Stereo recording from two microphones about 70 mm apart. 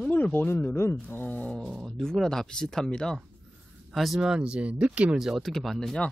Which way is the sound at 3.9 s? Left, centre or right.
Centre.